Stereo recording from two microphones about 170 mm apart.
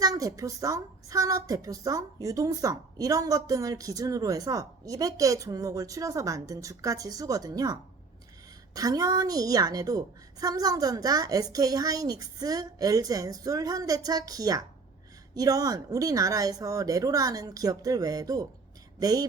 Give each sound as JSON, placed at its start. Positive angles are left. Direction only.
{"t": 0.0, "sound": "a woman's voice", "side_deg": -20}